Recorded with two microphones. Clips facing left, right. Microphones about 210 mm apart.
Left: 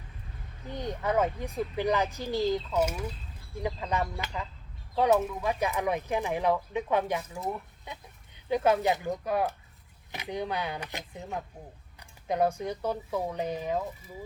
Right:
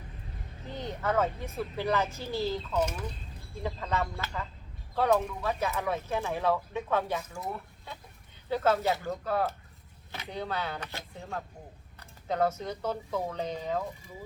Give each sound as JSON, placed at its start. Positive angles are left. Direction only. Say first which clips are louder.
{"t": 0.7, "sound": "speech", "louder": "left 1 dB", "side_deg": 15}